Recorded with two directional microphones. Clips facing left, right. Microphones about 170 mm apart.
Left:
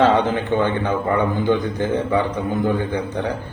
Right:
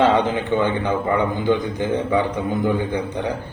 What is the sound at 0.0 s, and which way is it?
A man's voice, 15° right (ahead or behind).